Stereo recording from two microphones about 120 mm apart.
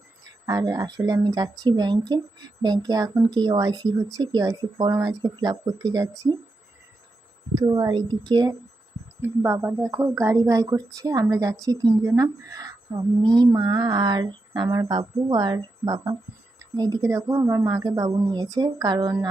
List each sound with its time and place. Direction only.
0.4 s a woman's voice: 35° right (ahead or behind)
7.5 s a woman's voice: 30° right (ahead or behind)
9.2 s a woman's voice: 20° right (ahead or behind); by 19.3 s 35° right (ahead or behind)